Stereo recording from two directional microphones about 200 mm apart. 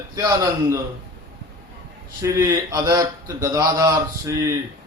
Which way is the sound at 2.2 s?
15° right (ahead or behind).